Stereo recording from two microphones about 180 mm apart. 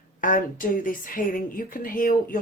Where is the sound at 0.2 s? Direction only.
50° left (ahead or behind).